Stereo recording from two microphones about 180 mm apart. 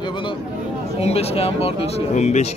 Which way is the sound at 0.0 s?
25° left (ahead or behind).